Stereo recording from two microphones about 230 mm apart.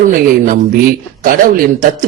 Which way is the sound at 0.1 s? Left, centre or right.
Right.